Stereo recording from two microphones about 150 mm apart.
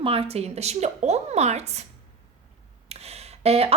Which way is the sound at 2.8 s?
45° right (ahead or behind).